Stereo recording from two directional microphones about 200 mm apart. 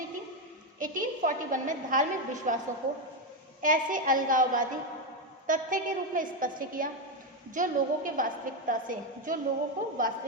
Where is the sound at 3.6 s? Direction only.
40° right (ahead or behind).